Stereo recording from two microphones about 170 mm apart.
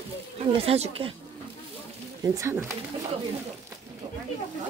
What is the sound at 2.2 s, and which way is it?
Speech, 20° right (ahead or behind).